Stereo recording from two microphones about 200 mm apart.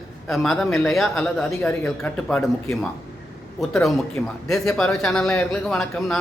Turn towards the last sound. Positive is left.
turn(degrees=0)  # may be behind; listen again after turning